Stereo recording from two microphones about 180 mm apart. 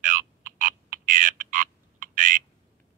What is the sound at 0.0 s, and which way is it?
Frog, 45° right (ahead or behind).